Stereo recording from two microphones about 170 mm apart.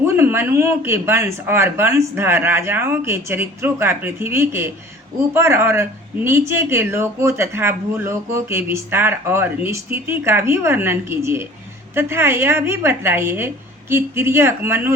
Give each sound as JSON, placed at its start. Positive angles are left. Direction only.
{"t": 0.0, "sound": "speech", "side_deg": -15}